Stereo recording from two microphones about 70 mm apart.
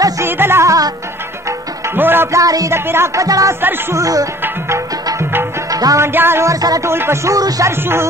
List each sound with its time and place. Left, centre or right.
0.2 s music: right
0.7 s music: right
2.0 s music: right
2.3 s music: right
2.7 s speech: right
3.2 s music: right
5.7 s music: right
6.1 s speech: right
6.4 s music: right
6.9 s speech: right
7.3 s music: right